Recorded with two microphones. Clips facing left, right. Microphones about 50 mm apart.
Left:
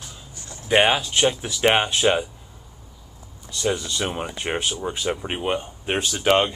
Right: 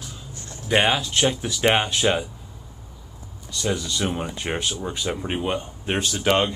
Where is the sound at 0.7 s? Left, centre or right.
Centre.